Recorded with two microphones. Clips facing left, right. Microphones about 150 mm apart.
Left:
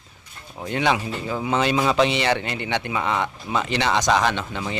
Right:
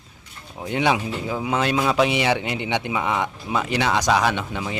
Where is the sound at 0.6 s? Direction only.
15° right (ahead or behind).